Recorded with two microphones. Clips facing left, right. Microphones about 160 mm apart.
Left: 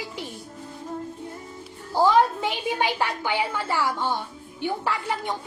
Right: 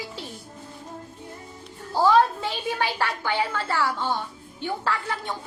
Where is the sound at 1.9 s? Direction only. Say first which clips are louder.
Even; 15° left (ahead or behind).